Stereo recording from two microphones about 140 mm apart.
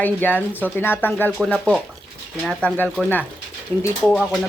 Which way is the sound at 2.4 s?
5° left (ahead or behind).